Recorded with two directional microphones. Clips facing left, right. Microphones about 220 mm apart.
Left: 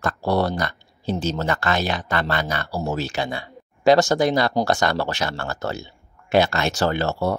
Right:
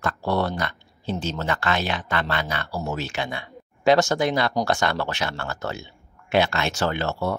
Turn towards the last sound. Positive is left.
turn(degrees=40)  # may be behind; listen again after turning